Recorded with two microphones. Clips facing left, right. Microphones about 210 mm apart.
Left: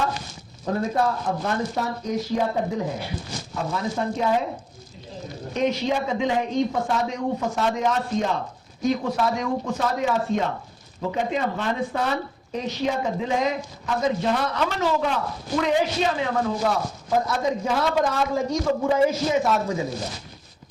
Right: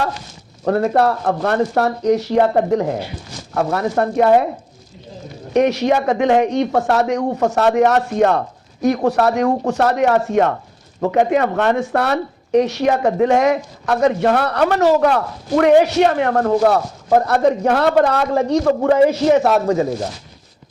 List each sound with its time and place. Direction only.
0.6 s speech: 70° right (ahead or behind)
5.5 s speech: 70° right (ahead or behind)